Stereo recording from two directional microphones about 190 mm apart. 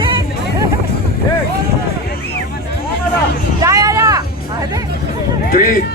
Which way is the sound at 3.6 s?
15° right (ahead or behind).